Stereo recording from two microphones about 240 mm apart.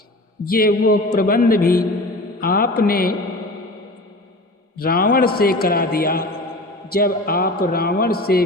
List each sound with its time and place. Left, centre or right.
0.4 s a man's voice: left
4.8 s a man's voice: left